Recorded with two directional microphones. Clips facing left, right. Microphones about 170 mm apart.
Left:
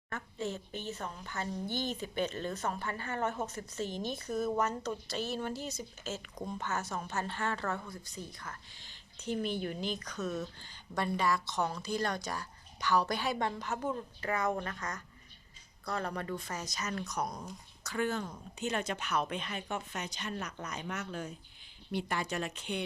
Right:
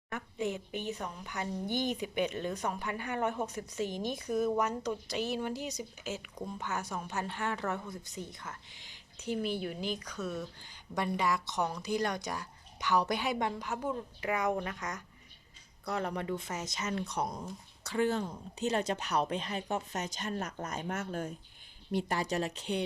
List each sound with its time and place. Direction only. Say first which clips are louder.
0.1 s speech: right 3 dB; 15° right (ahead or behind); by 21.3 s 50° right (ahead or behind)
21.9 s speech: right 3 dB; 35° right (ahead or behind)